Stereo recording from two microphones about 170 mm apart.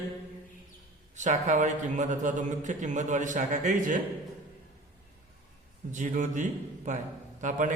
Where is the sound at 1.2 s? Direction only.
45° right (ahead or behind).